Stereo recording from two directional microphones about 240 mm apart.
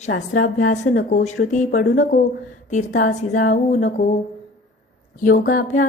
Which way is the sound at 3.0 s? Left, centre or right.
Left.